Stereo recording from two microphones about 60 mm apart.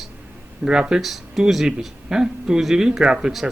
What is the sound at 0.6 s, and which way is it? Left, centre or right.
Speech, centre.